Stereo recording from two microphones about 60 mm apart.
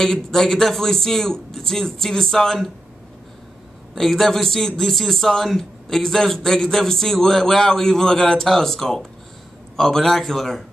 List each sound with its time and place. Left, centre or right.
0.0 s a man's voice: centre
3.9 s a man's voice: centre